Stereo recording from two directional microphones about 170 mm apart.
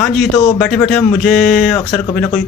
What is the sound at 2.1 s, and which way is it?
Speech, 10° left (ahead or behind).